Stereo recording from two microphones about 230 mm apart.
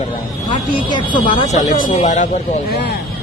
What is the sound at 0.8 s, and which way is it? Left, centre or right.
Speech, left.